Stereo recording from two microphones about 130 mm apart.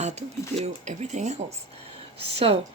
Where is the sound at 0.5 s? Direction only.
55° right (ahead or behind).